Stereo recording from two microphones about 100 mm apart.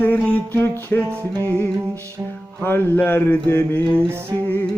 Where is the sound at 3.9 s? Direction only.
25° right (ahead or behind).